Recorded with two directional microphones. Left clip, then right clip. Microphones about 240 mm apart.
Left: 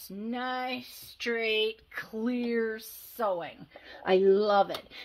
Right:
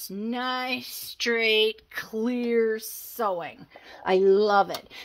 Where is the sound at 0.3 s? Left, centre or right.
Right.